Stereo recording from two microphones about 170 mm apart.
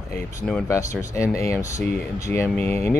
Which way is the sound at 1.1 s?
20° left (ahead or behind).